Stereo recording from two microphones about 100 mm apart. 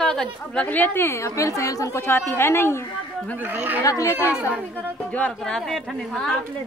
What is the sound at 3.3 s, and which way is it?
Speech, 15° right (ahead or behind).